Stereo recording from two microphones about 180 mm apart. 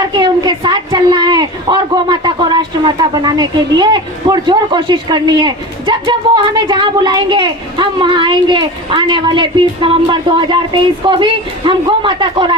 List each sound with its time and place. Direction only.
0.2 s speech: 25° right (ahead or behind)